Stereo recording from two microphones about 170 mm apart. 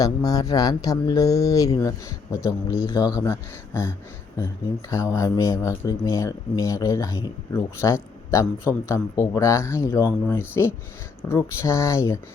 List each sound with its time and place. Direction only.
0.0 s speech: 20° left (ahead or behind)
4.9 s speech: 15° left (ahead or behind)